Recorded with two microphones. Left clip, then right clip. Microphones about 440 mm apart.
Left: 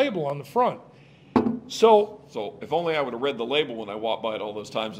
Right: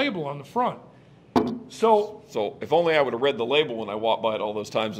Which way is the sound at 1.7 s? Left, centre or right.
Left.